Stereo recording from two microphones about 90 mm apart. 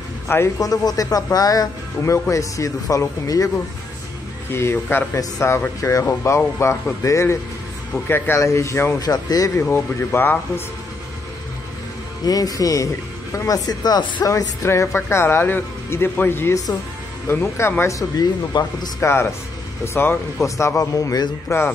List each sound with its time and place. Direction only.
0.6 s a man's voice: 40° left (ahead or behind)
4.5 s speech: 25° left (ahead or behind)
8.4 s speech: 35° left (ahead or behind)
9.0 s a man's voice: 45° left (ahead or behind)
9.6 s speech: 25° left (ahead or behind)
12.3 s a man's voice: 45° left (ahead or behind)
14.2 s speech: 35° left (ahead or behind)
18.9 s speech: 30° left (ahead or behind)
21.5 s speech: 30° left (ahead or behind)